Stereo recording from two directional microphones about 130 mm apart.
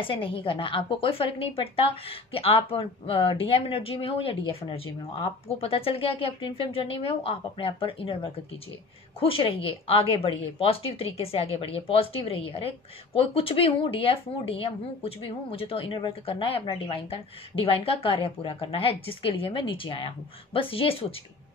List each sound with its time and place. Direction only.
0.0 s a woman's voice: 45° left (ahead or behind)